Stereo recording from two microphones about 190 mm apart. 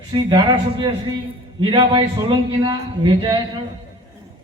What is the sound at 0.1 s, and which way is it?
A man's voice, 25° right (ahead or behind).